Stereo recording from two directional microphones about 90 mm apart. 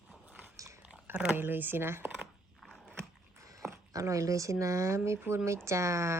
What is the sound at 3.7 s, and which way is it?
Speech, 35° right (ahead or behind).